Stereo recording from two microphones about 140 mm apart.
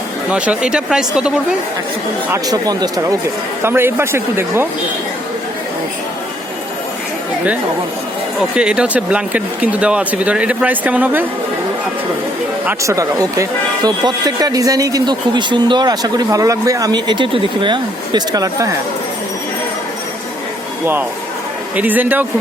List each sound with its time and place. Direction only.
0.3 s speech: 5° right (ahead or behind)
2.3 s speech: 25° right (ahead or behind)
3.6 s speech: 15° right (ahead or behind)
8.4 s speech: 5° right (ahead or behind)
12.8 s speech: 20° right (ahead or behind)
21.8 s speech: 10° right (ahead or behind)